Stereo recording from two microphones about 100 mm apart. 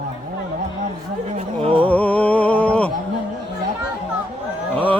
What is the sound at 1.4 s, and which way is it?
Music, 75° right (ahead or behind).